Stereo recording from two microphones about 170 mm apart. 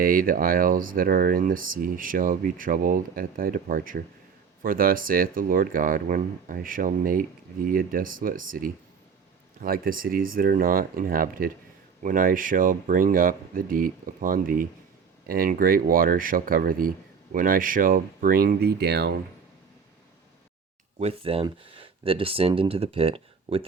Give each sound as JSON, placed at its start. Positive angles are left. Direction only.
{"t": 0.0, "sound": "speech", "side_deg": -55}
{"t": 21.0, "sound": "speech", "side_deg": -35}